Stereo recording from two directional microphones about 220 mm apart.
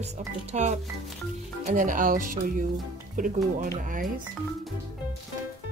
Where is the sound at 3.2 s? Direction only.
35° right (ahead or behind).